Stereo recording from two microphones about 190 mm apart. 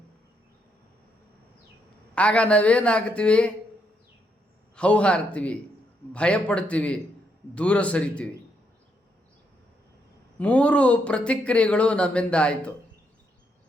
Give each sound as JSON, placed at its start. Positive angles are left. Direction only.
{"t": 2.1, "sound": "speech", "side_deg": 5}
{"t": 4.7, "sound": "speech", "side_deg": 5}
{"t": 10.3, "sound": "speech", "side_deg": 5}